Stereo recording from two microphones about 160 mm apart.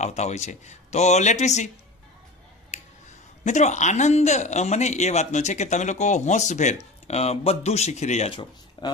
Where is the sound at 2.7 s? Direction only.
45° left (ahead or behind).